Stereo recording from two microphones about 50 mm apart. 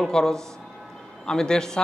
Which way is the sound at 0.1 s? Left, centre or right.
Centre.